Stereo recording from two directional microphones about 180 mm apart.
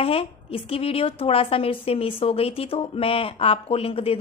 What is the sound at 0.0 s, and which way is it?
A woman's voice, 30° left (ahead or behind).